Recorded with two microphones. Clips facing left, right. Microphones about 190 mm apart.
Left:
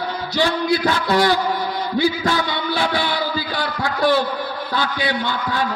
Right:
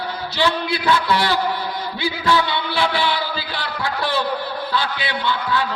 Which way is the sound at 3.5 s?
45° left (ahead or behind).